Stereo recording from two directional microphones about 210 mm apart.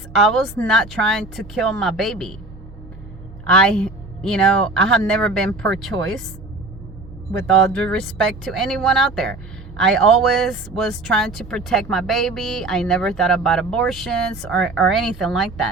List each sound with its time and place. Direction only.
0.1 s speech: centre (ahead or behind)
3.4 s speech: 5° left (ahead or behind)
7.3 s speech: 5° left (ahead or behind)
10.5 s speech: centre (ahead or behind)